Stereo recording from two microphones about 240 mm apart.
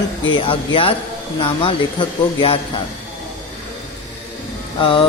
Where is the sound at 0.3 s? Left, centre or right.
Left.